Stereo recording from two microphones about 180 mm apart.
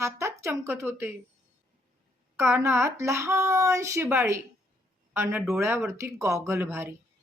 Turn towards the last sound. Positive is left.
turn(degrees=-15)  # may be behind; listen again after turning